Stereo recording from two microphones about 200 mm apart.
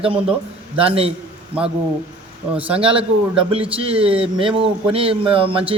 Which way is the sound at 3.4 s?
30° right (ahead or behind).